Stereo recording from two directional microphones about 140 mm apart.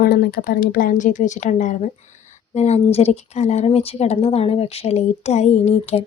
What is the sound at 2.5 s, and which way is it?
A woman's voice, 50° left (ahead or behind).